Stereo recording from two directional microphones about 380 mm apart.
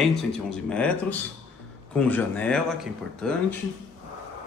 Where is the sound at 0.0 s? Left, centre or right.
Centre.